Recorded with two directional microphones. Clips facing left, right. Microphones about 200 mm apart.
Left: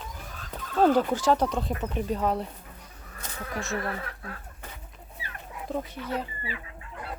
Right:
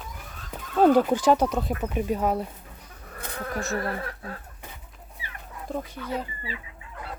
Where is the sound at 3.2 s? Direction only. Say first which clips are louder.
Right 3 dB; 50° right (ahead or behind).